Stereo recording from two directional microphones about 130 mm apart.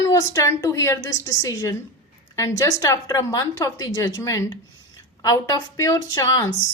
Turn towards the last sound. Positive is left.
turn(degrees=25)  # may be behind; listen again after turning